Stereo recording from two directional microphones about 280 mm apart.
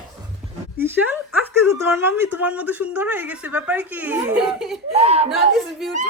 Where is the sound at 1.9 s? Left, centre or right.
Centre.